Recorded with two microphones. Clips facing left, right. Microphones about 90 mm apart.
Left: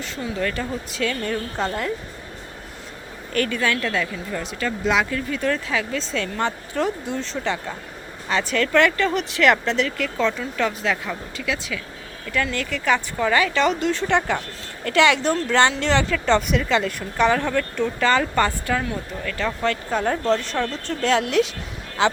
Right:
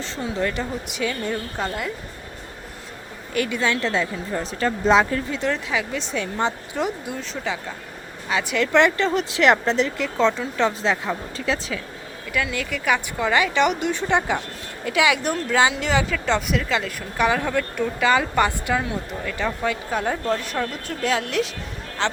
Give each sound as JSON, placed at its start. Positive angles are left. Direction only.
{"t": 0.0, "sound": "speech", "side_deg": -25}
{"t": 1.5, "sound": "a woman's voice", "side_deg": -5}
{"t": 3.3, "sound": "speech", "side_deg": -15}
{"t": 5.3, "sound": "speech", "side_deg": -20}
{"t": 8.7, "sound": "speech", "side_deg": -25}
{"t": 12.3, "sound": "a woman's voice", "side_deg": -5}